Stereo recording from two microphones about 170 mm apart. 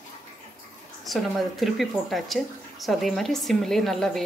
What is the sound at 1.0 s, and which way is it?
Speech, centre (ahead or behind).